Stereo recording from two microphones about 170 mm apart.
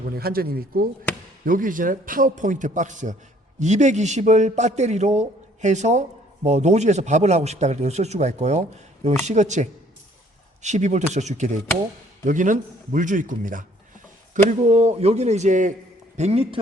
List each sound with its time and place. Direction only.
0.2 s a man's voice: 65° right (ahead or behind); by 16.6 s 35° right (ahead or behind)